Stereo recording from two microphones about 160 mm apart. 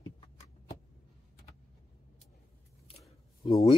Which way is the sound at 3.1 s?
35° left (ahead or behind).